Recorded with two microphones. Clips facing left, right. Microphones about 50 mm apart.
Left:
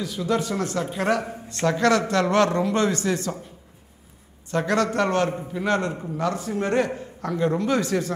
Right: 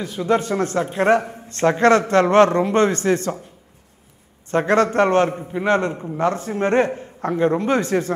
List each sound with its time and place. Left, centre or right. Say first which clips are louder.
0.0 s a man's voice: right 5 dB; right
4.5 s a man's voice: right 5 dB; right